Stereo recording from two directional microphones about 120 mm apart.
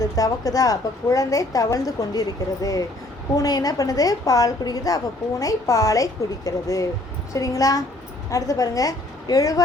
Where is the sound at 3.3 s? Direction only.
30° left (ahead or behind).